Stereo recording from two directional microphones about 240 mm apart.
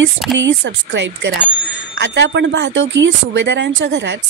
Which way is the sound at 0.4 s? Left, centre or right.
Right.